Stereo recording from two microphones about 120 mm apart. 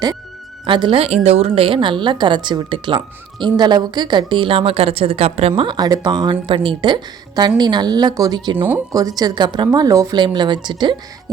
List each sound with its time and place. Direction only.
0.6 s a woman's voice: 40° right (ahead or behind)
5.6 s a woman's voice: 35° right (ahead or behind)
8.5 s speech: 15° right (ahead or behind)
8.9 s a woman's voice: 30° right (ahead or behind)